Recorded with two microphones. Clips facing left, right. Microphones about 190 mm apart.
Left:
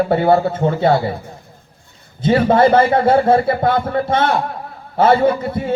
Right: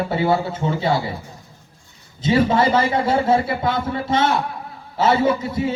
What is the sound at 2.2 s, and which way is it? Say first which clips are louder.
A man's voice: left 4 dB; 55° left (ahead or behind).